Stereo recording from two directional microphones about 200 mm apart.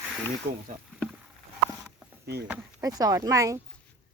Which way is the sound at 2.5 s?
20° right (ahead or behind).